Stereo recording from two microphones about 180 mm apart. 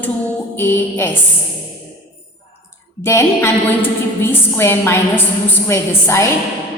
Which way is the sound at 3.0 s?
15° left (ahead or behind).